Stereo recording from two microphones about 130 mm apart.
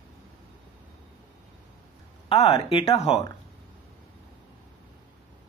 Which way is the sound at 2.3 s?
45° left (ahead or behind).